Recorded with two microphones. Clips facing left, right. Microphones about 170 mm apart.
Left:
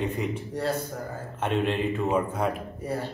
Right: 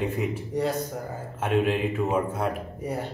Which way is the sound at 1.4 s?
5° right (ahead or behind).